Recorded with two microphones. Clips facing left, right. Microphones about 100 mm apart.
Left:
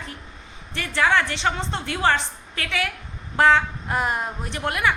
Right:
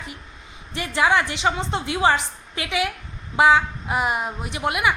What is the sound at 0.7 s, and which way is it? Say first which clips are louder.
A woman's voice: right 1 dB; 15° right (ahead or behind).